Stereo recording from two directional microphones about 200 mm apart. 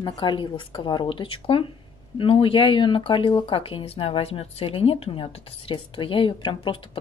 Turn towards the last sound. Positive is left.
turn(degrees=25)  # may be behind; listen again after turning